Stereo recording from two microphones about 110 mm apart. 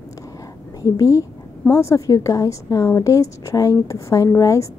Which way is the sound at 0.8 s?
35° left (ahead or behind).